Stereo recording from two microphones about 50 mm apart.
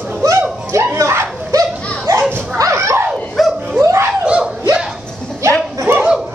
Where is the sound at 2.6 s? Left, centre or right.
Right.